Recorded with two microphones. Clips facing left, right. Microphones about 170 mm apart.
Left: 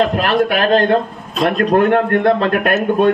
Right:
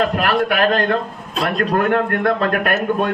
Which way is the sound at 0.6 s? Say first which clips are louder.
Left 4 dB; 30° left (ahead or behind).